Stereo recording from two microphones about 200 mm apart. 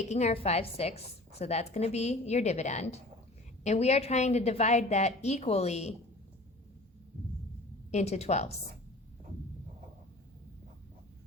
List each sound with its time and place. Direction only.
0.0 s a woman's voice: 35° left (ahead or behind)
7.9 s a woman's voice: 35° left (ahead or behind)